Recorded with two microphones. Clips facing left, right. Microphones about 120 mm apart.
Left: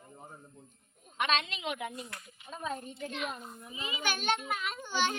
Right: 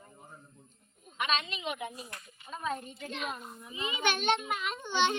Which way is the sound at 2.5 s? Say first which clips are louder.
Right 2 dB; 35° left (ahead or behind).